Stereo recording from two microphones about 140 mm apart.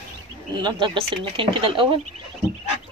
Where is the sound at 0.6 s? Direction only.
35° right (ahead or behind).